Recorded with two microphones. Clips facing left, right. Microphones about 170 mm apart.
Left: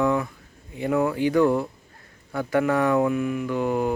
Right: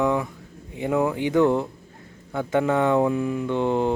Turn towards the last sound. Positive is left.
turn(degrees=-25)  # may be behind; listen again after turning